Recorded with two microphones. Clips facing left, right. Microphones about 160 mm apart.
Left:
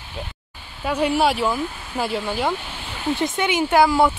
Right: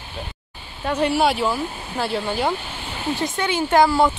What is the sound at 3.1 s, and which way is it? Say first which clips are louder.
Speech: left 2 dB; 20° left (ahead or behind).